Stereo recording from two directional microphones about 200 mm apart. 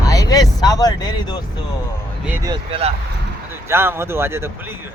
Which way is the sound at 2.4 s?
25° right (ahead or behind).